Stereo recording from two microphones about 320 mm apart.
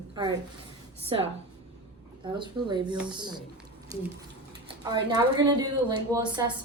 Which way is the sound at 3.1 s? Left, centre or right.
Centre.